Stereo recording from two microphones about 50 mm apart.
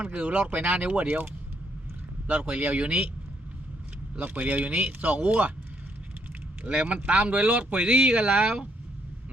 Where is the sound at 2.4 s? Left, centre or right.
Right.